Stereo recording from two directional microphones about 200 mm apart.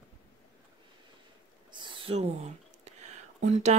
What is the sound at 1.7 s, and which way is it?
Whispering, 25° right (ahead or behind).